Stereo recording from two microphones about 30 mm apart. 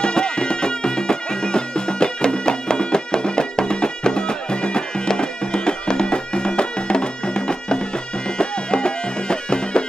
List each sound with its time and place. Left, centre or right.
0.0 s music: left